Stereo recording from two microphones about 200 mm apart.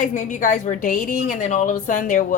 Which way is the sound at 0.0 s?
40° left (ahead or behind).